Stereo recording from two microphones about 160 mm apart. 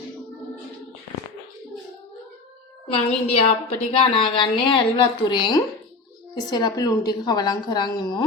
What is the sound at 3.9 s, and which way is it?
A woman's voice, 35° left (ahead or behind).